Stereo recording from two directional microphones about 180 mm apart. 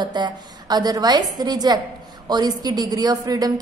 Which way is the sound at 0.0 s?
25° right (ahead or behind).